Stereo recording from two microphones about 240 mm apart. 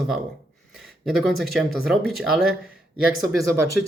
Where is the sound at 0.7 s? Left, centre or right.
Centre.